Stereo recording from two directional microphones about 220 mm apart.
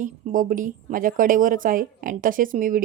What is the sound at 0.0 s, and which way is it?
Speech, 35° right (ahead or behind).